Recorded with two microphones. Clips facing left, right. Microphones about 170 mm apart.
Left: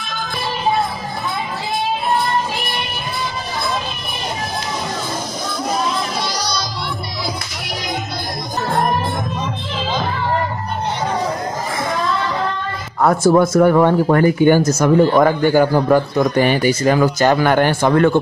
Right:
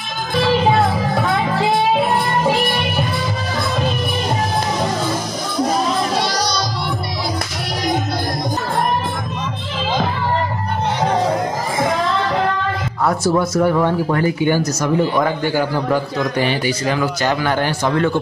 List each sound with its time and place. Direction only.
0.4 s music: 85° right
13.0 s speech: 50° left (ahead or behind)